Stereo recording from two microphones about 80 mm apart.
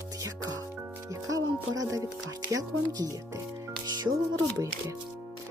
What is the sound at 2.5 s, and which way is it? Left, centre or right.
Speech, right.